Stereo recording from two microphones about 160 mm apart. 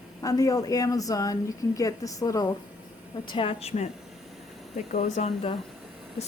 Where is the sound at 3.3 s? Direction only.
35° left (ahead or behind).